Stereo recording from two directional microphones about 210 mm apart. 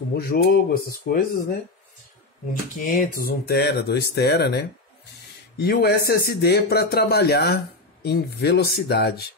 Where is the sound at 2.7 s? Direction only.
40° left (ahead or behind).